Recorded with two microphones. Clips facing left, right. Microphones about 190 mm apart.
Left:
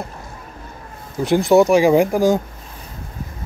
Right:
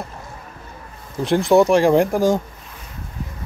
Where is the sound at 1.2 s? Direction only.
5° left (ahead or behind).